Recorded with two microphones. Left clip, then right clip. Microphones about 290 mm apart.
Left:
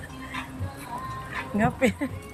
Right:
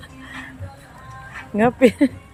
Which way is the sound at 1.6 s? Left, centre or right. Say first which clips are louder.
Right 10 dB; centre.